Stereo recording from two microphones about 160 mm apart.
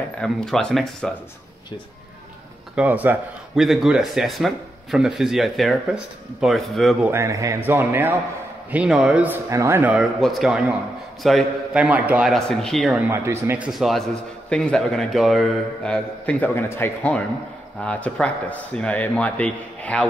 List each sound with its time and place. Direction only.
0.2 s a man's voice: 5° left (ahead or behind)
2.7 s a man's voice: 10° right (ahead or behind)
7.1 s speech: 20° right (ahead or behind)
9.9 s a man's voice: centre (ahead or behind)
13.1 s speech: 15° right (ahead or behind)
13.7 s a man's voice: centre (ahead or behind)